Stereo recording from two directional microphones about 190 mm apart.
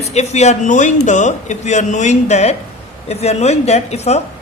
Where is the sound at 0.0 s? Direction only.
35° left (ahead or behind).